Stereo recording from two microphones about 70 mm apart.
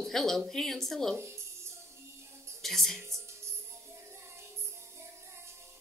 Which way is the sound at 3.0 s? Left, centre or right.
Right.